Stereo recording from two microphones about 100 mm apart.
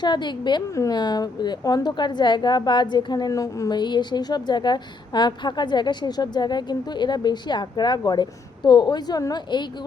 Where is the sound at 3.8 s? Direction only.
50° left (ahead or behind).